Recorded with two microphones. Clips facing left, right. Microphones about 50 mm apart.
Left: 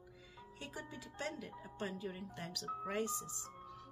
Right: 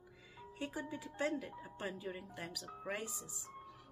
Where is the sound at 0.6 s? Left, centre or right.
Centre.